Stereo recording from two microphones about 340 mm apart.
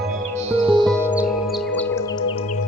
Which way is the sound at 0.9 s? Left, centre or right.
Centre.